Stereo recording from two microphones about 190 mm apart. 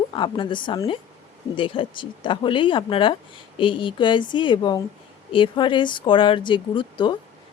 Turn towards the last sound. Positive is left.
turn(degrees=25)  # may be behind; listen again after turning